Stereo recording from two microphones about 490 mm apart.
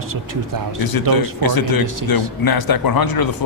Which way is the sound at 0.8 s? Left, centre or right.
Left.